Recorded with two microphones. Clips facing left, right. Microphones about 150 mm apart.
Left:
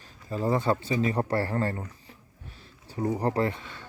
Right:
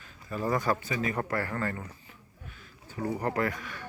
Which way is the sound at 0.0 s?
30° left (ahead or behind).